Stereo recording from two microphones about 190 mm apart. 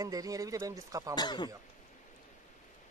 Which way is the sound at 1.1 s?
25° left (ahead or behind).